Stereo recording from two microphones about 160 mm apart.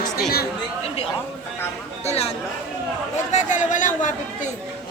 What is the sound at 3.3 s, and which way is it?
Speech, 50° left (ahead or behind).